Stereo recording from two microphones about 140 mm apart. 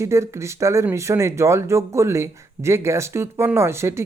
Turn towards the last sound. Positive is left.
turn(degrees=-20)  # may be behind; listen again after turning